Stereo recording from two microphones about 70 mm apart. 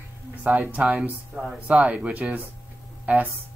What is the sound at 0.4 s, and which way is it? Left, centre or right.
Speech, right.